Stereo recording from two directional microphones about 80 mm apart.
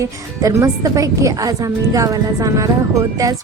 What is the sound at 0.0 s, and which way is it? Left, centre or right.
A woman's voice, right.